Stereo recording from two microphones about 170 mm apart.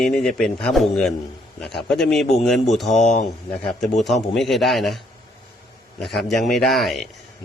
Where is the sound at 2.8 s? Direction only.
45° left (ahead or behind).